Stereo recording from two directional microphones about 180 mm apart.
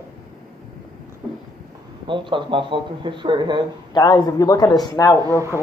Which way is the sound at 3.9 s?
20° left (ahead or behind).